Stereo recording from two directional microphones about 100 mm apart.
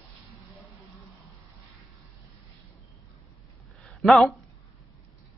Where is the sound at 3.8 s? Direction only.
Centre (ahead or behind).